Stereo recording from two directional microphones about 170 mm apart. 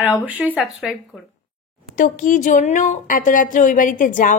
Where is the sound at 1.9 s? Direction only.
50° left (ahead or behind).